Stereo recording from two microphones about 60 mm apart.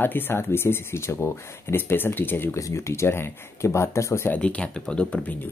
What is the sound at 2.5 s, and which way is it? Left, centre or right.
Speech, left.